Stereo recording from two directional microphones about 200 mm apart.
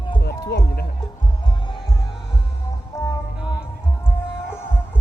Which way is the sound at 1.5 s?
20° left (ahead or behind).